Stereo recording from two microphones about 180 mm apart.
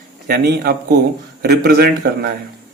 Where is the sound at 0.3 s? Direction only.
60° right (ahead or behind).